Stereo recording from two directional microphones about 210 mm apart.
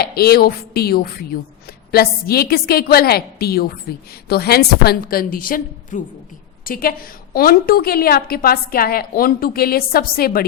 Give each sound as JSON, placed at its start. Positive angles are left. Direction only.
{"t": 0.0, "sound": "a woman's voice", "side_deg": 45}